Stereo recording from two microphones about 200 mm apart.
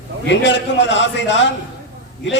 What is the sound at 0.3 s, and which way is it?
A man's voice, 60° left (ahead or behind).